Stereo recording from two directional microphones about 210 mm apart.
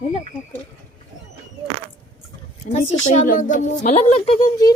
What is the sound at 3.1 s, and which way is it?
Speech, 40° left (ahead or behind).